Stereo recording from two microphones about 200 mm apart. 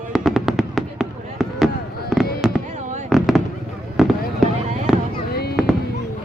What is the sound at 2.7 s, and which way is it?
Fireworks, 35° right (ahead or behind).